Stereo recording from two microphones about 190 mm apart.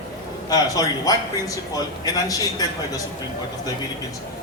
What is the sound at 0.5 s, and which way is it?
A man's voice, 20° left (ahead or behind).